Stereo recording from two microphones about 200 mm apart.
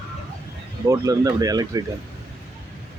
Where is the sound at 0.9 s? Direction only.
15° right (ahead or behind).